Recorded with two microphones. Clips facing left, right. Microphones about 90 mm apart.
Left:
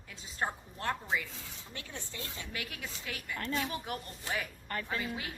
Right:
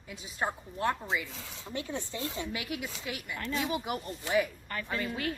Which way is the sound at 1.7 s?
20° right (ahead or behind).